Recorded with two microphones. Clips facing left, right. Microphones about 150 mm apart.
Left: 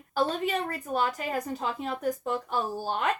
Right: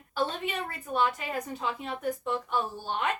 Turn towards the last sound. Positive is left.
turn(degrees=40)  # may be behind; listen again after turning